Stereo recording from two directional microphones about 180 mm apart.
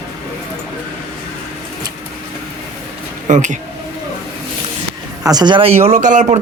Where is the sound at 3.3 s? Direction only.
40° right (ahead or behind).